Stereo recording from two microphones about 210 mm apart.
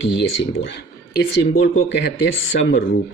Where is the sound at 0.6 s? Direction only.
50° left (ahead or behind).